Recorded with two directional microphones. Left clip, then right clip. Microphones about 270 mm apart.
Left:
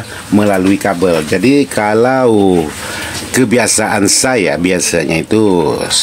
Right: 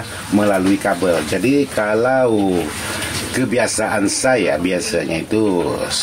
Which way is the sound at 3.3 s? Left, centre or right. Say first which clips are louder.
Left 7 dB; left.